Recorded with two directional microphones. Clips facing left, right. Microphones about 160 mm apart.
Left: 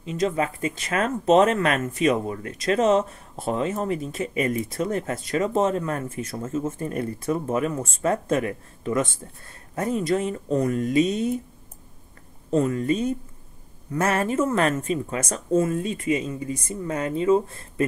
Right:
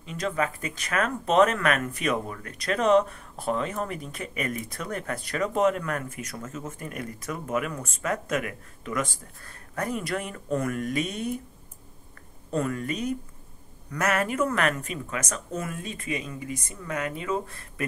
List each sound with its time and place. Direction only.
0.2 s speech: 25° left (ahead or behind)
12.5 s speech: 25° left (ahead or behind)